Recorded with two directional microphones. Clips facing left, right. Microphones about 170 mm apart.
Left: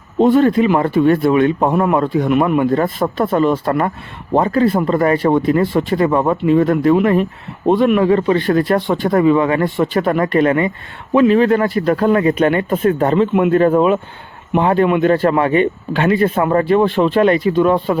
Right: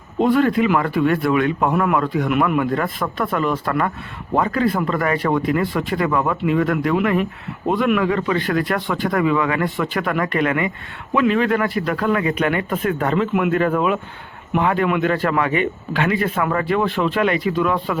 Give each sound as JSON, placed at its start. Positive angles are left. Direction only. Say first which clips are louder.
{"t": 0.2, "sound": "speech", "louder": "left 5 dB", "side_deg": 25}